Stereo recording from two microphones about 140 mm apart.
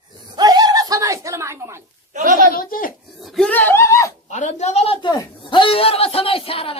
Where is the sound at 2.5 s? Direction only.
90° left.